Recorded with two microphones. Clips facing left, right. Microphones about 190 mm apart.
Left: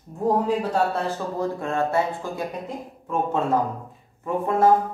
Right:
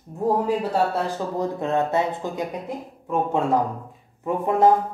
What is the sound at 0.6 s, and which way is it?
A man's voice, 10° right (ahead or behind).